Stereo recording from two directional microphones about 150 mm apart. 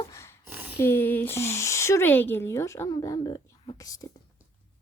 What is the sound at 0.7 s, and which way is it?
Speech, 15° left (ahead or behind).